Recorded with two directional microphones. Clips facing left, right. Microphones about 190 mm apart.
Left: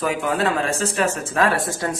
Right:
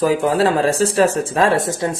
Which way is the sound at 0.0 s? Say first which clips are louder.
Right 6 dB; 35° right (ahead or behind).